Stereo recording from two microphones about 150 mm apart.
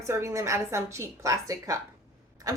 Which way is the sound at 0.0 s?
20° right (ahead or behind).